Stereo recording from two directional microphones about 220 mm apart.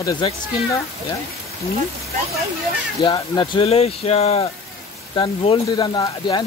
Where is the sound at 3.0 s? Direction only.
20° left (ahead or behind).